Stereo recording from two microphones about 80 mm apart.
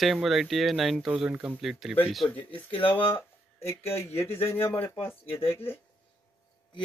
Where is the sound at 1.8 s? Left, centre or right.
Centre.